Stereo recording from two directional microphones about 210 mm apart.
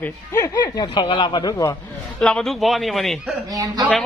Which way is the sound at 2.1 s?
5° left (ahead or behind).